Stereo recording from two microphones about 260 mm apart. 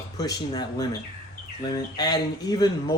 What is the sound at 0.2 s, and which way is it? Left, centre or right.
Speech, centre.